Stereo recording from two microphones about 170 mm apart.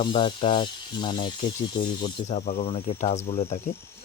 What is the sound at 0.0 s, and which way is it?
Speech, 30° left (ahead or behind).